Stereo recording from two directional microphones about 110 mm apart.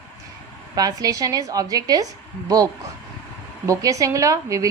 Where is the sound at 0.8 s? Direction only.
35° right (ahead or behind).